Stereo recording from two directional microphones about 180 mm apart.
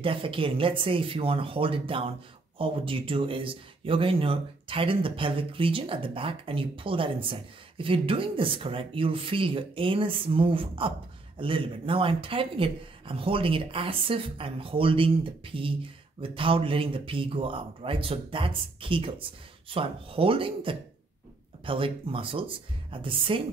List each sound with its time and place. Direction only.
0.0 s speech: 30° right (ahead or behind)